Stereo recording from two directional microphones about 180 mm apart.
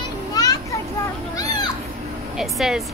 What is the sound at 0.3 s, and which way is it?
Children playing, 20° left (ahead or behind).